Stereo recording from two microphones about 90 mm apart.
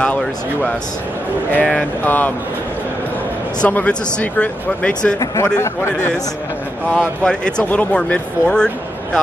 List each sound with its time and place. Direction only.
1.5 s speech: 10° left (ahead or behind)
3.6 s speech: 15° left (ahead or behind)
5.2 s speech: 40° left (ahead or behind)
6.9 s speech: 10° left (ahead or behind)